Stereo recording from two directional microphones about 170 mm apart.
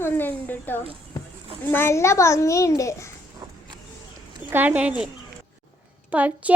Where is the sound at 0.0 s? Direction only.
10° left (ahead or behind).